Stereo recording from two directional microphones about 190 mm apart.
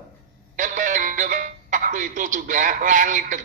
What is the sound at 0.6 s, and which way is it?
Speech, 45° right (ahead or behind).